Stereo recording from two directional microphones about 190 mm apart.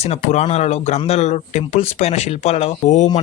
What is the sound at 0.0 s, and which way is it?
Speech, 35° left (ahead or behind).